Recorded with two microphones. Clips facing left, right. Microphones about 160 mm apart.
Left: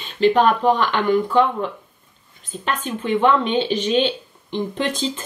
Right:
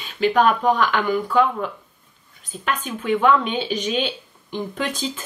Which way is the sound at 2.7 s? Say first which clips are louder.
Left 1 dB; 10° right (ahead or behind).